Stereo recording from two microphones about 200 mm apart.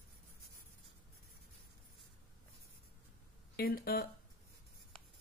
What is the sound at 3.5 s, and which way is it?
Speech, 50° left (ahead or behind).